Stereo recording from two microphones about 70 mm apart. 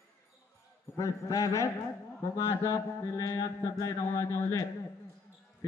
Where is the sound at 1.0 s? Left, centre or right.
Left.